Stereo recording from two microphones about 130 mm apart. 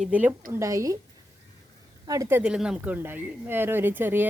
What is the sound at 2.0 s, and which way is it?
Speech, 25° right (ahead or behind).